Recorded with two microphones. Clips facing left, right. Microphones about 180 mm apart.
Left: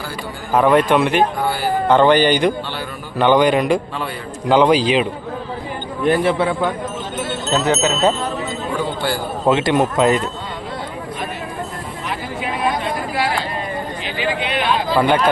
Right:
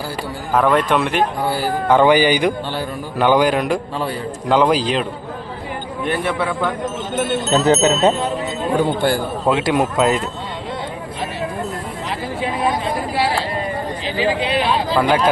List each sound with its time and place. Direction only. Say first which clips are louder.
0.5 s speech: left 2 dB; centre (ahead or behind)
1.9 s speech: even; 10° right (ahead or behind)
6.1 s a man's voice: left 5 dB; 30° left (ahead or behind)
7.5 s speech: right 3 dB; 25° right (ahead or behind)
9.0 s a man's voice: right 4 dB; 50° right (ahead or behind)
9.5 s speech: left 2 dB; 5° right (ahead or behind)
14.0 s a sound: right 4 dB; 30° right (ahead or behind)
14.9 s speech: left 1 dB; centre (ahead or behind)